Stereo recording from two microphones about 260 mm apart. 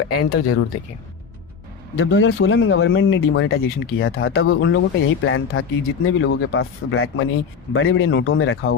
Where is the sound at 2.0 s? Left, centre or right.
Left.